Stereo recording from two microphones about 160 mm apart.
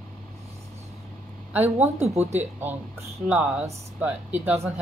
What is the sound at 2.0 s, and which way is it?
Speech, 40° right (ahead or behind).